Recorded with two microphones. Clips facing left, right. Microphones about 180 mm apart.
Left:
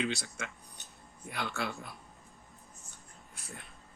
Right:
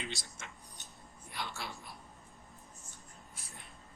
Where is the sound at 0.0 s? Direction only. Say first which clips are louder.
Left 9 dB; 75° left (ahead or behind).